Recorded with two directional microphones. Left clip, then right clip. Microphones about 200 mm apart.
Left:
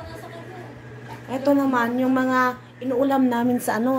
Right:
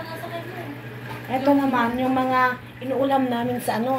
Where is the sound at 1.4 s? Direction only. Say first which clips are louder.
Even; 15° left (ahead or behind).